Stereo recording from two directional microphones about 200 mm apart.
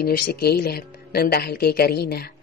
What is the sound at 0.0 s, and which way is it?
Speech, 50° left (ahead or behind).